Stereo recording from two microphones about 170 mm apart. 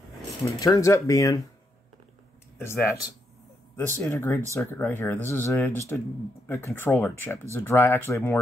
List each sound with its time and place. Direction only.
0.5 s speech: 20° left (ahead or behind)
2.6 s speech: 15° left (ahead or behind)
4.0 s speech: 15° left (ahead or behind)